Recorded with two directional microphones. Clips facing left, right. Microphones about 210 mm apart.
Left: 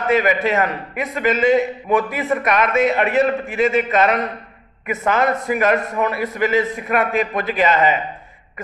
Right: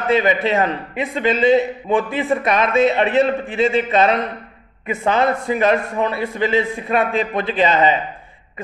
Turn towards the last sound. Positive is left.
turn(degrees=-30)  # may be behind; listen again after turning